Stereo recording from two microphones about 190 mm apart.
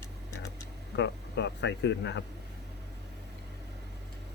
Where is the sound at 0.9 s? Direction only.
65° left (ahead or behind).